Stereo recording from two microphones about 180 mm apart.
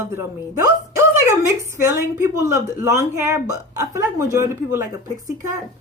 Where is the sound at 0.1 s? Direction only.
15° right (ahead or behind).